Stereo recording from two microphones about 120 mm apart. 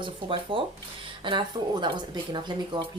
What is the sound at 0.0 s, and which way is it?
Speech, 45° right (ahead or behind).